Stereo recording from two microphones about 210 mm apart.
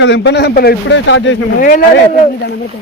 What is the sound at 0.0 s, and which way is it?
Speech, 60° left (ahead or behind).